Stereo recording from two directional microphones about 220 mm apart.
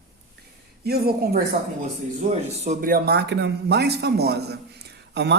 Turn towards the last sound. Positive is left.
turn(degrees=-50)  # may be behind; listen again after turning